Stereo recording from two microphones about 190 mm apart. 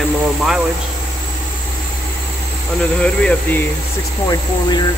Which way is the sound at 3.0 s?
5° left (ahead or behind).